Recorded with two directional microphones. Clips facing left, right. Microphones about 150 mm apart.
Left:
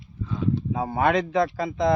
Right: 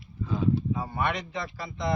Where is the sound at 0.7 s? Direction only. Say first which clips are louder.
Left 5 dB; 90° left.